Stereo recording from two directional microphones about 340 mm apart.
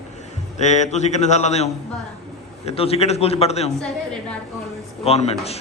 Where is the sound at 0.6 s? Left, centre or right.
Centre.